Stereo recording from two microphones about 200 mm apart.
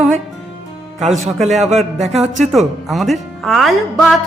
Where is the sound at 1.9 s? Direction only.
35° right (ahead or behind).